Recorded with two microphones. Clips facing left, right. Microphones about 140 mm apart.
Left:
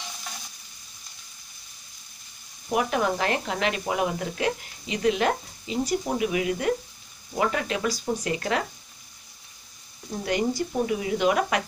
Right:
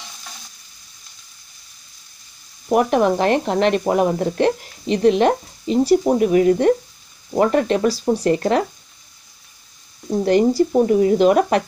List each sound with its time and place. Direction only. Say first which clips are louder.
2.7 s speech: right 9 dB; 45° right (ahead or behind)
10.0 s speech: right 10 dB; 40° right (ahead or behind)